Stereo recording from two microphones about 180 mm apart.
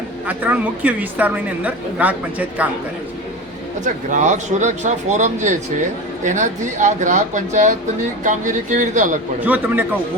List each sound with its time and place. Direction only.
0.3 s a woman's voice: 10° right (ahead or behind)
4.1 s speech: 45° right (ahead or behind)
9.4 s a woman's voice: 10° right (ahead or behind)